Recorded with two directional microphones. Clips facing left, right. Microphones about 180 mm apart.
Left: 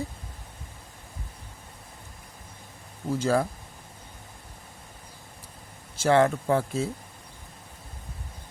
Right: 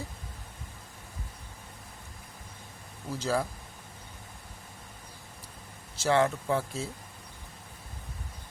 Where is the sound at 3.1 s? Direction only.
55° left (ahead or behind).